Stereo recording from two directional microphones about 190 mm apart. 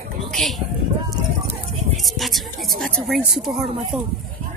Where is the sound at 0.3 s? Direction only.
Centre (ahead or behind).